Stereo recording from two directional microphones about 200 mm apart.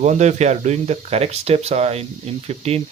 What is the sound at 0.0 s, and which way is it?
Speech, 35° right (ahead or behind).